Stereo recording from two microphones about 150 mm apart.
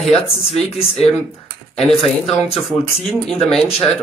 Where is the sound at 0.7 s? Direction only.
45° left (ahead or behind).